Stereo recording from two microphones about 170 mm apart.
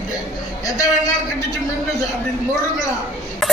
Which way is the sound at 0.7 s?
20° left (ahead or behind).